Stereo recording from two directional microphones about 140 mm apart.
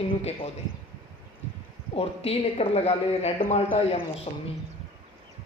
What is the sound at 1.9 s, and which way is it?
A woman's voice, 45° left (ahead or behind).